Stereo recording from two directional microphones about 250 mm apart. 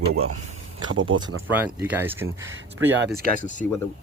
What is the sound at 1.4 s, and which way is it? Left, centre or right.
Speech, centre.